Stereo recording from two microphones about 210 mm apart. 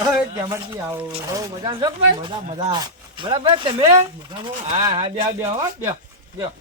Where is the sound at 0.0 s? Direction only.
15° right (ahead or behind).